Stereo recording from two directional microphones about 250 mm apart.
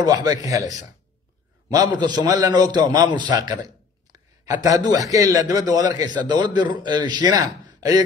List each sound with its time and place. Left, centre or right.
0.0 s a man's voice: centre
2.0 s a man's voice: centre